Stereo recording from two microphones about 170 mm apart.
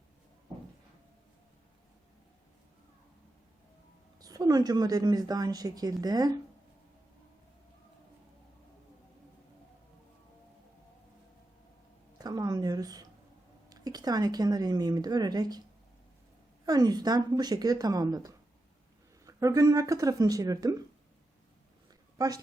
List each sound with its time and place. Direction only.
4.2 s speech: 20° right (ahead or behind)
12.2 s a sound: 20° right (ahead or behind)
13.7 s speech: 20° right (ahead or behind)
16.6 s speech: 20° right (ahead or behind)